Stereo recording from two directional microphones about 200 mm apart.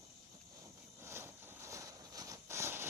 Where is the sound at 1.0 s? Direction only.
10° right (ahead or behind).